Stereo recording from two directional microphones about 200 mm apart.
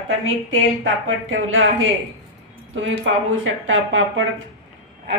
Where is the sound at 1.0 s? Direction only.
80° right.